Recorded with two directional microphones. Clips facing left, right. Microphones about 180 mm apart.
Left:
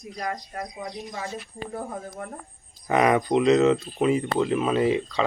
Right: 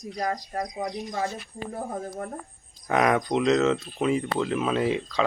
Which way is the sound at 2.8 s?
Centre (ahead or behind).